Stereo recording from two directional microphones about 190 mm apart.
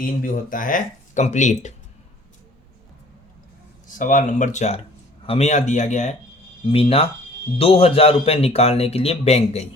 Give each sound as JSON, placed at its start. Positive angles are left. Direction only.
{"t": 0.2, "sound": "a man's voice", "side_deg": 45}
{"t": 3.8, "sound": "a man's voice", "side_deg": 45}